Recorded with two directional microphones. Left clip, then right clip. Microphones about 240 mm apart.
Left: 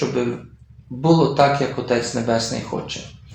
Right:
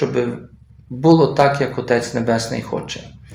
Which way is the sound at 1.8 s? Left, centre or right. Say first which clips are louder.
Right 4 dB; right.